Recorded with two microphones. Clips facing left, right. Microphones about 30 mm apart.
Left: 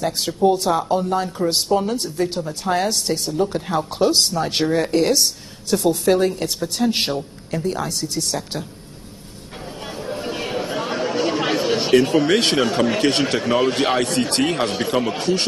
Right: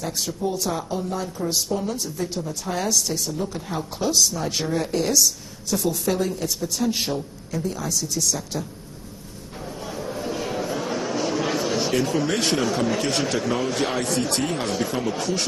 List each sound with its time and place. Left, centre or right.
0.0 s speech: left
3.5 s speech: left
5.7 s a woman's voice: left
6.0 s speech: left
9.8 s a sound: left
14.1 s speech: left